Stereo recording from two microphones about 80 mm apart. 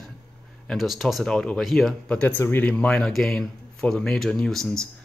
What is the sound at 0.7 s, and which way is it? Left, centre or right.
Speech, centre.